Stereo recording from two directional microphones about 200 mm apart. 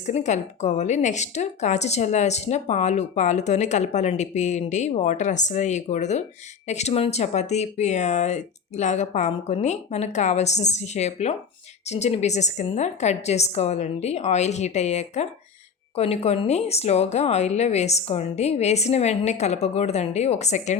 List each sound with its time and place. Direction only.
0.0 s speech: 35° left (ahead or behind)